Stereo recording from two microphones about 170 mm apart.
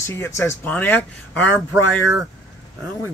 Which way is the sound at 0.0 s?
15° left (ahead or behind).